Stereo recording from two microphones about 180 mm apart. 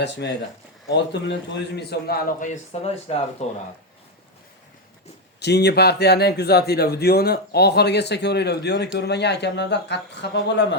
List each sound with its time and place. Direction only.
0.2 s a man's voice: 75° left (ahead or behind); by 3.6 s 35° left (ahead or behind)
5.4 s a man's voice: 65° left (ahead or behind)